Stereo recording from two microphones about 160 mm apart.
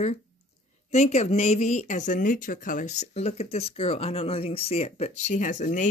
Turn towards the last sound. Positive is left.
turn(degrees=55)  # may be behind; listen again after turning